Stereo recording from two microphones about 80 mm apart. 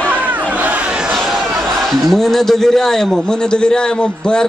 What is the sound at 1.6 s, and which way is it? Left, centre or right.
Speech, centre.